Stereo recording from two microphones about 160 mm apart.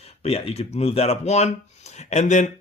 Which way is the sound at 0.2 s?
40° left (ahead or behind).